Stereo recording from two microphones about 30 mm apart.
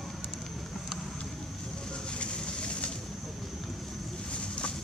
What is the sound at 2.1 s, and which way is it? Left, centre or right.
Vehicle, left.